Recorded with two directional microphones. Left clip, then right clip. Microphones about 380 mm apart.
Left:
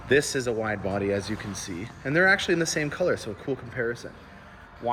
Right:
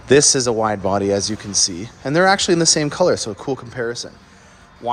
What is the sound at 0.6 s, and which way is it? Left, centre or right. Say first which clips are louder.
Speech: right 10 dB; right.